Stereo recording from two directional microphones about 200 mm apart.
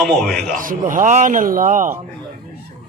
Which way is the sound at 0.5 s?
40° right (ahead or behind).